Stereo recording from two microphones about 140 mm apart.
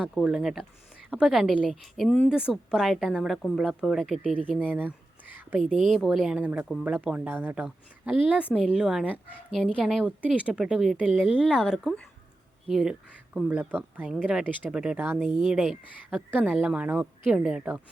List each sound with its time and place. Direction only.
0.1 s a woman's voice: 5° right (ahead or behind)
2.3 s a woman's voice: 5° right (ahead or behind)
15.4 s a woman's voice: centre (ahead or behind)